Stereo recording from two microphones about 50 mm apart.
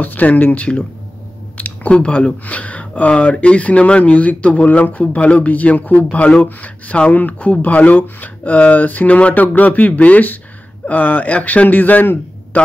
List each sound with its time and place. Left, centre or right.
0.0 s a man's voice: left